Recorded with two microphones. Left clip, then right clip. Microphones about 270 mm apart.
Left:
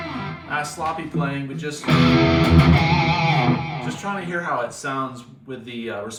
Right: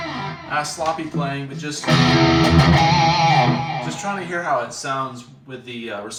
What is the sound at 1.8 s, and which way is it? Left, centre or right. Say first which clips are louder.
Music: right 2 dB; right.